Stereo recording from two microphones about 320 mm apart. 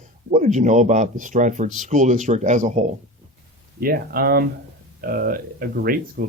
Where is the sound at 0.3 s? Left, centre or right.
Right.